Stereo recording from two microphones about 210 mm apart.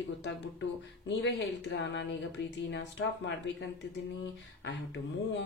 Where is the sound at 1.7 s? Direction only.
60° left (ahead or behind).